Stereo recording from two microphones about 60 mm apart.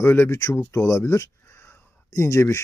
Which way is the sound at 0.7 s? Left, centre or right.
Left.